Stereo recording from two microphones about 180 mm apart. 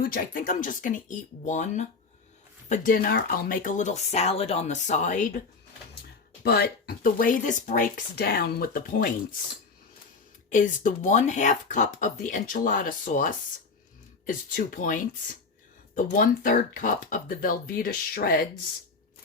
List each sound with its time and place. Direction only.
0.0 s speech: 50° left (ahead or behind)
6.4 s speech: 60° left (ahead or behind)
10.5 s speech: 45° left (ahead or behind)